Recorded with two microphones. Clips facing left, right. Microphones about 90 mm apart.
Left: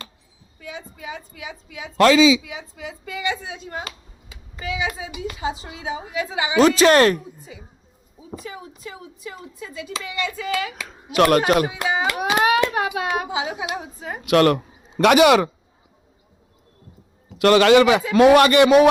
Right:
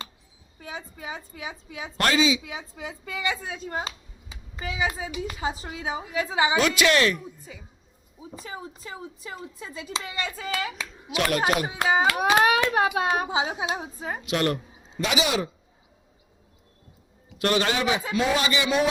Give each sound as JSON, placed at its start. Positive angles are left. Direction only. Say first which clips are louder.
{"t": 0.6, "sound": "a child's voice", "louder": "left 2 dB", "side_deg": -35}
{"t": 3.8, "sound": "a sound", "louder": "even", "side_deg": -30}
{"t": 5.4, "sound": "a child's voice", "louder": "left 4 dB", "side_deg": -40}
{"t": 6.6, "sound": "speech", "louder": "left 11 dB", "side_deg": 35}
{"t": 8.4, "sound": "a child's voice", "louder": "right 1 dB", "side_deg": -30}
{"t": 10.8, "sound": "speech", "louder": "left 13 dB", "side_deg": 50}
{"t": 11.6, "sound": "a child's voice", "louder": "even", "side_deg": -35}
{"t": 14.3, "sound": "speech", "louder": "left 10 dB", "side_deg": 85}
{"t": 14.9, "sound": "a man's voice", "louder": "left 12 dB", "side_deg": 60}
{"t": 17.3, "sound": "a man's voice", "louder": "left 11 dB", "side_deg": 90}
{"t": 18.2, "sound": "a man's voice", "louder": "left 15 dB", "side_deg": 65}